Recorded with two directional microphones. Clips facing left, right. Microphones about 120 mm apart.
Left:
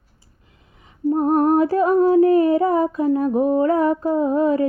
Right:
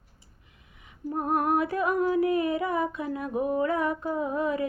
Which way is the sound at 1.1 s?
35° left (ahead or behind).